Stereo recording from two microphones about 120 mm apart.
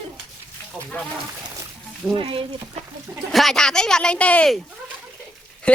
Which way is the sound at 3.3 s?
5° left (ahead or behind).